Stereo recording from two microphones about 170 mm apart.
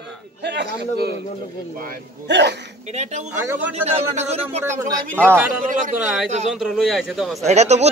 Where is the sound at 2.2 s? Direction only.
90° right.